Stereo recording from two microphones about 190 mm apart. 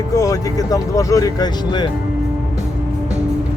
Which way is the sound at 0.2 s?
20° left (ahead or behind).